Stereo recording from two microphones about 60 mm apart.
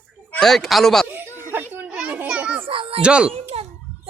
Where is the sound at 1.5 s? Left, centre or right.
Right.